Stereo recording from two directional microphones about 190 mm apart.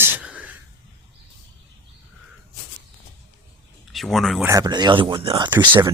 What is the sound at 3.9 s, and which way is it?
Speech, centre (ahead or behind).